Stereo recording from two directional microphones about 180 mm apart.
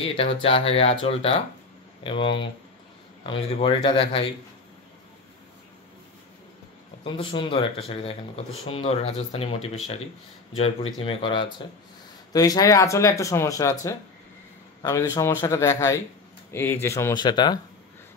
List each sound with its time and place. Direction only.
0.0 s speech: 30° left (ahead or behind)
7.1 s speech: 30° left (ahead or behind)